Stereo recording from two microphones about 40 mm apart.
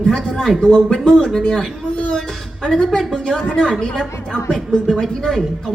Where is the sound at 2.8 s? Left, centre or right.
Centre.